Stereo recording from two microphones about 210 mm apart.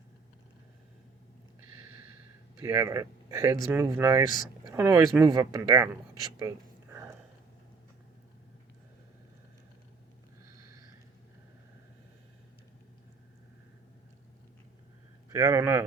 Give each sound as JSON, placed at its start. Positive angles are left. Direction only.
{"t": 2.6, "sound": "speech", "side_deg": -10}
{"t": 6.9, "sound": "a sound", "side_deg": -10}
{"t": 15.3, "sound": "speech", "side_deg": -15}